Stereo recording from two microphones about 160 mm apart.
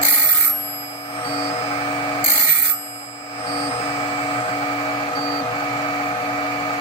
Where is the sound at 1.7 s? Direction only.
35° left (ahead or behind).